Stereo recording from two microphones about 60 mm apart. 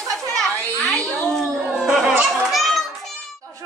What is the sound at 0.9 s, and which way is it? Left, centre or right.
Speech, centre.